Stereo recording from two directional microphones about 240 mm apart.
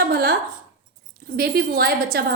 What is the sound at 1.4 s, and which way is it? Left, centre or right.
Speech, right.